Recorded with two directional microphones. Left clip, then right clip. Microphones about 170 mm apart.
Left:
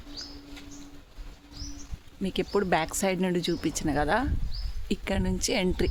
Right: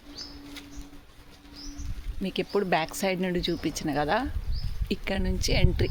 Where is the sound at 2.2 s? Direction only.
15° left (ahead or behind).